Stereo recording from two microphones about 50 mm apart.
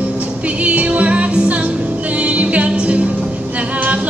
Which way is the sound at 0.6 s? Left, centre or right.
Right.